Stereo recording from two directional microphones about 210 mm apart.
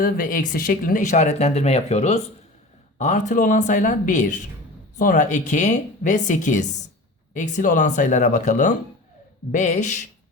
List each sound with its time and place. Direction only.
0.0 s speech: 40° left (ahead or behind)